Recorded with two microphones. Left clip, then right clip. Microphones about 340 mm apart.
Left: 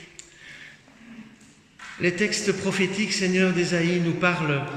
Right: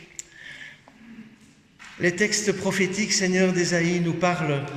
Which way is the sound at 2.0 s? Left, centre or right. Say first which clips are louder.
Right 1 dB; centre.